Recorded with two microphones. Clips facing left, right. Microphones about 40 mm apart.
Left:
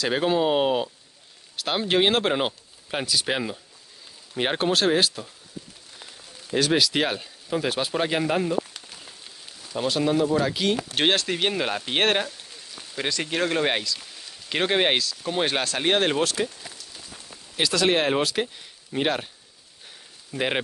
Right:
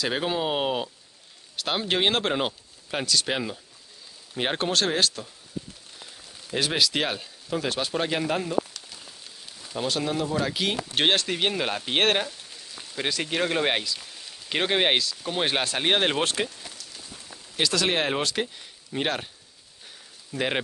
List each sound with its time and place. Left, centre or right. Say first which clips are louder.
0.0 s speech: left 4 dB; centre
5.9 s rain on surface: left 3 dB; centre
6.7 s speech: left 2 dB; centre
9.6 s speech: left 3 dB; centre
16.2 s speech: left 2 dB; right
17.6 s speech: left 3 dB; centre
20.3 s speech: left 1 dB; centre